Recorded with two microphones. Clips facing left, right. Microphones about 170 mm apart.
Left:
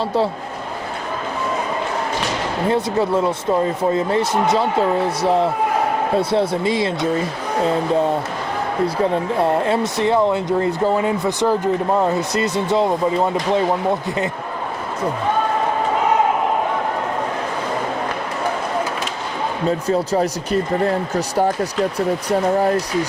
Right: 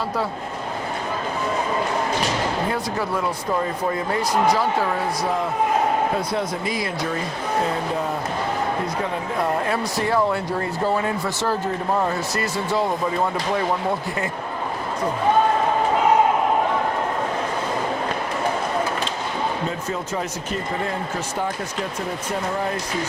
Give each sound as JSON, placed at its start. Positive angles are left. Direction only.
{"t": 2.6, "sound": "speech", "side_deg": 25}
{"t": 9.4, "sound": "speech", "side_deg": 25}
{"t": 19.9, "sound": "speech", "side_deg": 35}